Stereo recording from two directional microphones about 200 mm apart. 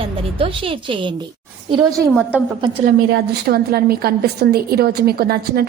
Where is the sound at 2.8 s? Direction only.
50° right (ahead or behind).